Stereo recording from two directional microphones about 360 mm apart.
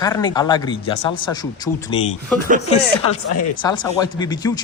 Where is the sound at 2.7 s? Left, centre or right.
Centre.